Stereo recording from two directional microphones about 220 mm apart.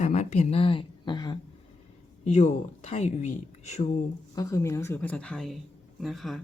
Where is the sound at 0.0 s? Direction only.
30° left (ahead or behind).